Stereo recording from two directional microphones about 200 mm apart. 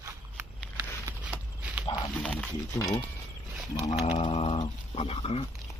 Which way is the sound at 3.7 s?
30° left (ahead or behind).